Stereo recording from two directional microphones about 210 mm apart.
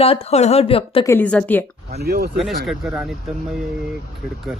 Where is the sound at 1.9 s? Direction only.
50° right (ahead or behind).